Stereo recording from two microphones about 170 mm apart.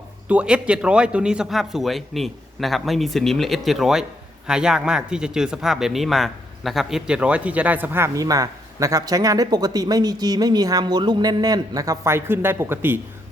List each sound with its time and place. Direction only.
0.3 s a man's voice: 5° right (ahead or behind)